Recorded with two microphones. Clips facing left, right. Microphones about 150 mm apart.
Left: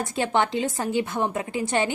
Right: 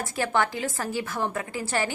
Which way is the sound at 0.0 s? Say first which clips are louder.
Left 2 dB; 20° left (ahead or behind).